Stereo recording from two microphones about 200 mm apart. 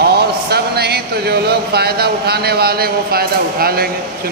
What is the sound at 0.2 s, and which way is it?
Speech, 55° right (ahead or behind).